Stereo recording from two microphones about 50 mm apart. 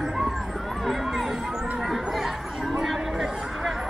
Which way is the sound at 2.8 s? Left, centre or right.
Centre.